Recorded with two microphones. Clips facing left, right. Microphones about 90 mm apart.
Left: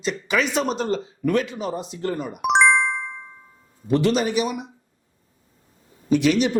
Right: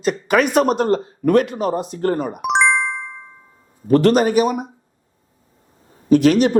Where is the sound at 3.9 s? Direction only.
50° right (ahead or behind).